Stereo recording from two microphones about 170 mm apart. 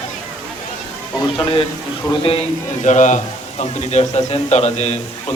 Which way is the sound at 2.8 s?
45° left (ahead or behind).